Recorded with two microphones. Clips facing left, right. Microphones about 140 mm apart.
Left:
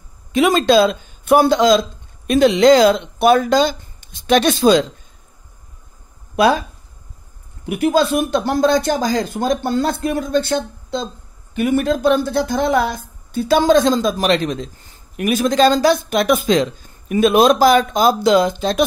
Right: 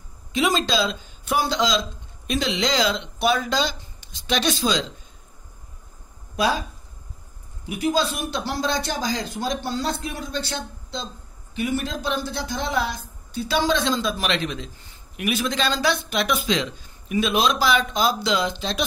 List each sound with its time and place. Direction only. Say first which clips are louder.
0.3 s speech: left 9 dB; 55° left (ahead or behind)
6.3 s speech: left 8 dB; 65° left (ahead or behind)
7.6 s speech: left 7 dB; 60° left (ahead or behind)